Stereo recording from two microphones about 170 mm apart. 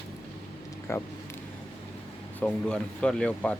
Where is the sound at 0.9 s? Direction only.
15° left (ahead or behind).